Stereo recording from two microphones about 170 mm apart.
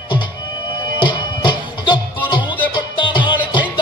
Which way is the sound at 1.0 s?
25° left (ahead or behind).